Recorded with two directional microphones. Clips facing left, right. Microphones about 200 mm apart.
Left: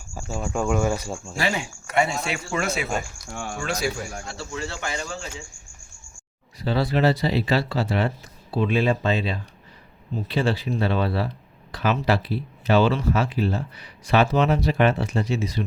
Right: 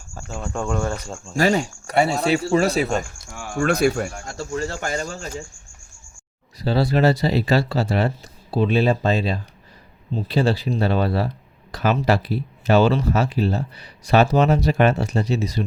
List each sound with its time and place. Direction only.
0.1 s speech: 10° left (ahead or behind)
1.4 s speech: 40° right (ahead or behind)
3.6 s speech: 55° right (ahead or behind); by 5.4 s 40° right (ahead or behind)
6.6 s speech: 35° right (ahead or behind)